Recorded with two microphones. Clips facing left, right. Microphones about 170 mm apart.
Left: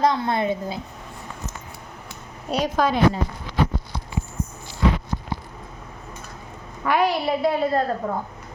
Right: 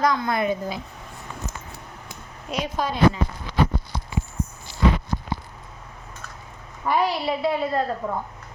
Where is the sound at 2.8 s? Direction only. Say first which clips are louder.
Left 7 dB; 90° left.